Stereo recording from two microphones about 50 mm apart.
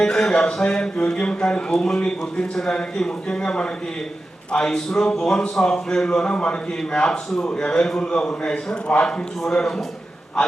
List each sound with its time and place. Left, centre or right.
0.0 s a man's voice: centre